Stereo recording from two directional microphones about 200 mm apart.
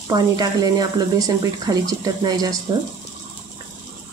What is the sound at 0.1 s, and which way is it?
Speech, 20° right (ahead or behind).